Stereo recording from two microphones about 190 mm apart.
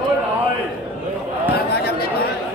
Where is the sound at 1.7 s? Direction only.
55° left (ahead or behind).